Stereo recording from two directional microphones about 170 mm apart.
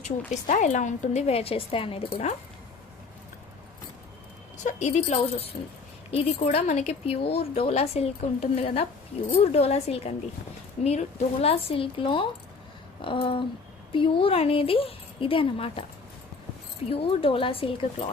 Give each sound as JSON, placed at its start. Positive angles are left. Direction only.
{"t": 0.3, "sound": "a woman's voice", "side_deg": 45}
{"t": 4.5, "sound": "a woman's voice", "side_deg": 45}
{"t": 16.9, "sound": "a woman's voice", "side_deg": 35}